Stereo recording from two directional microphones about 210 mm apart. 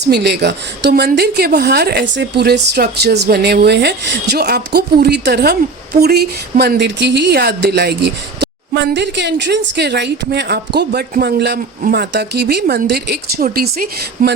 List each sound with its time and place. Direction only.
0.0 s a woman's voice: 50° right (ahead or behind)